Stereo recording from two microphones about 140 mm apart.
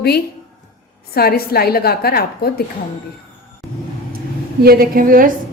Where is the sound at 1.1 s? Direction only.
90° left.